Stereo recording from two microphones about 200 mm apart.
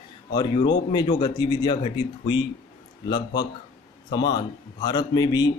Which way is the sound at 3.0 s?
20° left (ahead or behind).